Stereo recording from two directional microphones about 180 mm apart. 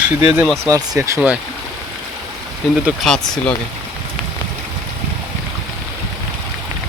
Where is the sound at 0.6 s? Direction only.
20° right (ahead or behind).